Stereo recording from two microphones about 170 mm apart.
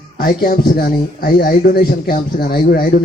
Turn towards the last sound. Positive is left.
turn(degrees=60)  # may be behind; listen again after turning